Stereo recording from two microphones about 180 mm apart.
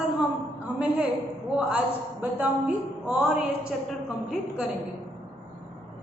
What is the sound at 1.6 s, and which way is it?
A woman's voice, 5° right (ahead or behind).